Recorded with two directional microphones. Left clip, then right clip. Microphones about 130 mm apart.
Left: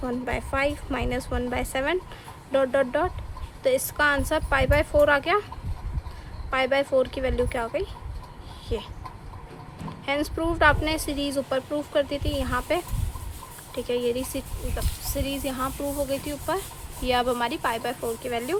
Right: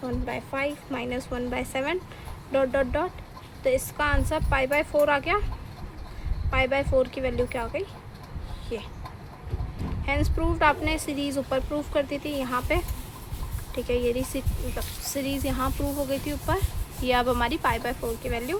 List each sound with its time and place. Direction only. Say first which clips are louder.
0.0 s speech: left 3 dB; 35° left (ahead or behind)
6.5 s speech: left 1 dB; 25° left (ahead or behind)
10.1 s speech: left 2 dB; 25° left (ahead or behind)